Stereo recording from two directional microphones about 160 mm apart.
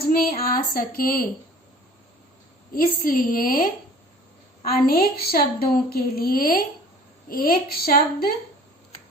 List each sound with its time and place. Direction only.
0.0 s speech: 70° left (ahead or behind)
2.7 s a woman's voice: 65° left (ahead or behind)